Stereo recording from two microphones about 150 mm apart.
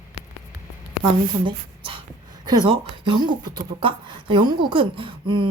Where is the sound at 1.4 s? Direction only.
35° right (ahead or behind).